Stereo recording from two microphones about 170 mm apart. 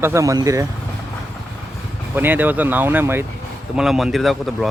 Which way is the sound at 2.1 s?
10° right (ahead or behind).